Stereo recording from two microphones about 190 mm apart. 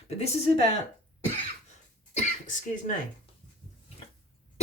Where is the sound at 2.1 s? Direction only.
40° left (ahead or behind).